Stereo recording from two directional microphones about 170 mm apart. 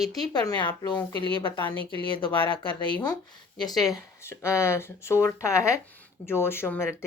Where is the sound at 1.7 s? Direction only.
30° right (ahead or behind).